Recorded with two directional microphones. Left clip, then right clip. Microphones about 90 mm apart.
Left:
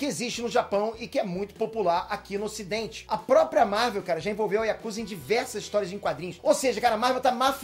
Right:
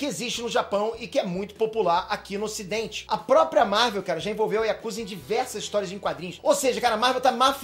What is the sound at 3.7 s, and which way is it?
Speech, 50° right (ahead or behind).